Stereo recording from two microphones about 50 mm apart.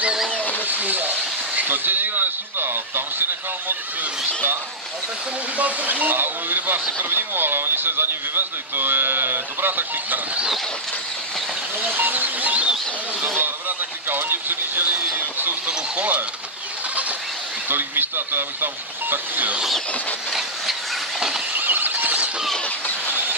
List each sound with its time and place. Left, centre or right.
0.3 s a sound: left
0.7 s a sound: right
1.6 s speech: right
5.6 s speech: right
11.8 s speech: right
13.4 s speech: right
17.6 s speech: right
20.2 s train: centre
21.5 s a sound: right